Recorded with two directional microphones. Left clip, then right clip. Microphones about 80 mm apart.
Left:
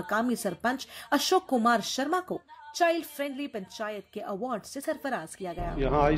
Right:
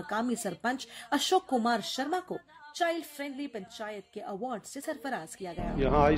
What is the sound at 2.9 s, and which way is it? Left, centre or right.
A woman's voice, left.